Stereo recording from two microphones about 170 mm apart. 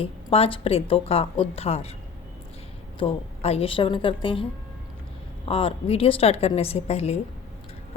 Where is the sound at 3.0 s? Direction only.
35° left (ahead or behind).